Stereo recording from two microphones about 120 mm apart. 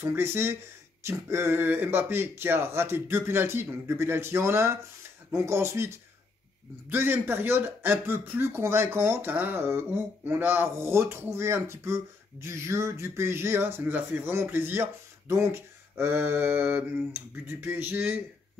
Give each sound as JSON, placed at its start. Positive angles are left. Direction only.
{"t": 0.0, "sound": "speech", "side_deg": -20}